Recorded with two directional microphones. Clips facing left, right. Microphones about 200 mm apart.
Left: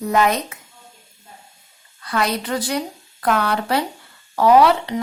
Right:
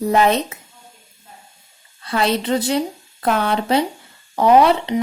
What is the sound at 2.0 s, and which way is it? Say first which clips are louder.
Speech: right 3 dB; 25° right (ahead or behind).